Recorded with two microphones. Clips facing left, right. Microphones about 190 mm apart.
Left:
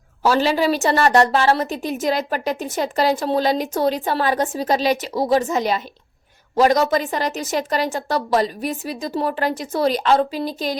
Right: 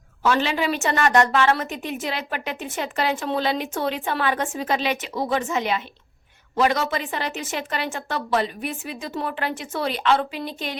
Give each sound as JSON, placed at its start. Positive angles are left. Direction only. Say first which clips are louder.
{"t": 0.2, "sound": "a woman's voice", "louder": "left 4 dB", "side_deg": 35}